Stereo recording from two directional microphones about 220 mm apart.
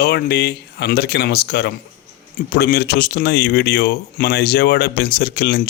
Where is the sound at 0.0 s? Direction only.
45° left (ahead or behind).